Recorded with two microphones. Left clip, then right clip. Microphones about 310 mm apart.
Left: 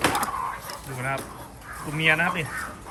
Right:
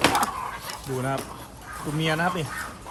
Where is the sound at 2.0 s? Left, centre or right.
Right.